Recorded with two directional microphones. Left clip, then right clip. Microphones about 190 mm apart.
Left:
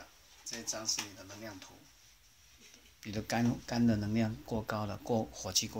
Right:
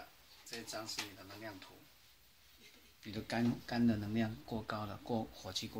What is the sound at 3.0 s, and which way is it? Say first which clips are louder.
Speech: left 4 dB; 50° left (ahead or behind).